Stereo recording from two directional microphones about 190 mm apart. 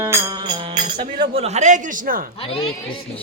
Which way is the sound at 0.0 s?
20° right (ahead or behind).